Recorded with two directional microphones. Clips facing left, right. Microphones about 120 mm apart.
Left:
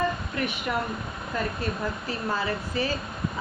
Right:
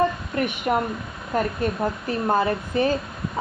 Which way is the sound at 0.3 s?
50° right (ahead or behind).